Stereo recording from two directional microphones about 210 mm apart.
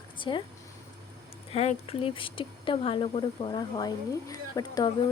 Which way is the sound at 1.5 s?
30° left (ahead or behind).